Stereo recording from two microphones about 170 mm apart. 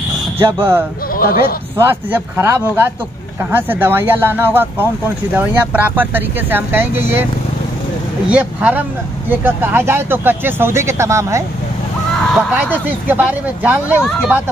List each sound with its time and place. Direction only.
0.4 s speech: 15° right (ahead or behind)
1.1 s a sound: 55° left (ahead or behind)
1.8 s speech: 10° right (ahead or behind)
8.3 s speech: 10° right (ahead or behind)